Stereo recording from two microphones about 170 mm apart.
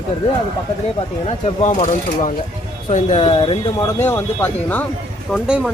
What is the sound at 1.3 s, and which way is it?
Speech, 40° left (ahead or behind).